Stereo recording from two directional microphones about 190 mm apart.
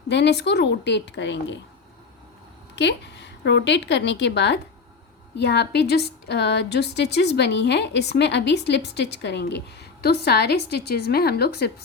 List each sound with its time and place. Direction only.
0.1 s a woman's voice: 65° left (ahead or behind)
2.7 s a woman's voice: 65° left (ahead or behind)